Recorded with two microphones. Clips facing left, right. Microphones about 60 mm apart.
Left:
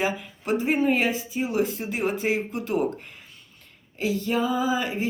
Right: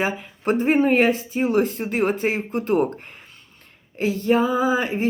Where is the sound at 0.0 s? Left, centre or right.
Right.